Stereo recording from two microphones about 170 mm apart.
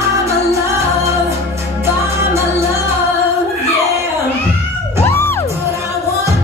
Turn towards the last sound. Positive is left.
turn(degrees=15)  # may be behind; listen again after turning